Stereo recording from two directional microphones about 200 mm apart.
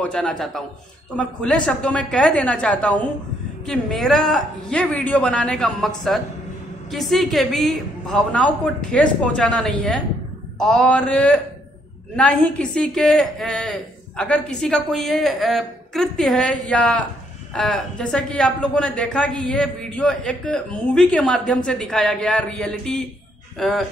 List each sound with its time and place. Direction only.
0.0 s a woman's voice: 5° left (ahead or behind)